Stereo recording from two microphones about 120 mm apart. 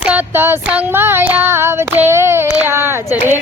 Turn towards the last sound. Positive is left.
turn(degrees=-20)  # may be behind; listen again after turning